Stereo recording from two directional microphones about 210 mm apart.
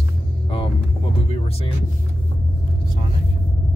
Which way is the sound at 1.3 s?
30° left (ahead or behind).